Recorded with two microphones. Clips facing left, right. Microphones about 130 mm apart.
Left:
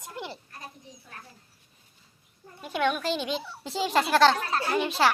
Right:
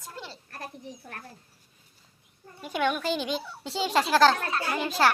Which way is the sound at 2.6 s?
Centre (ahead or behind).